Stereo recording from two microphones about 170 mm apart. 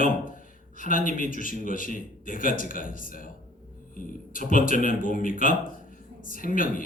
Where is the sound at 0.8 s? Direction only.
55° left (ahead or behind).